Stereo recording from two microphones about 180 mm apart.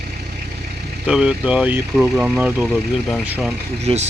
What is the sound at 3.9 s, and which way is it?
Speech, 30° right (ahead or behind).